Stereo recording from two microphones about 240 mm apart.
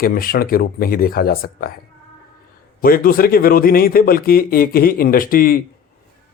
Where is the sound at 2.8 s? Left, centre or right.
Left.